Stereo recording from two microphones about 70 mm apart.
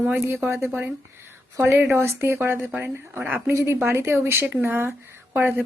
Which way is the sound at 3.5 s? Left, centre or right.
Right.